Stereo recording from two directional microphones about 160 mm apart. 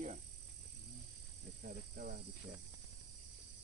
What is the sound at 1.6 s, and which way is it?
Speech, 75° right (ahead or behind).